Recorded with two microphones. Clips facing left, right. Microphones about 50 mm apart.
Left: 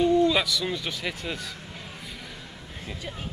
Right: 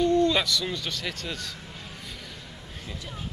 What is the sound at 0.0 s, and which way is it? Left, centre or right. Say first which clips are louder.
Speech: left 1 dB; centre.